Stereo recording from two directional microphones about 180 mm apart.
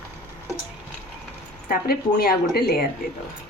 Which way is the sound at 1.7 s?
55° left (ahead or behind).